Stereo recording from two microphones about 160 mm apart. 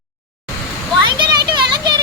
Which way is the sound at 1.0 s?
30° right (ahead or behind).